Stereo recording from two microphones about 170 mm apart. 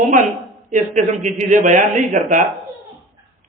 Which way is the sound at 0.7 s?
45° right (ahead or behind).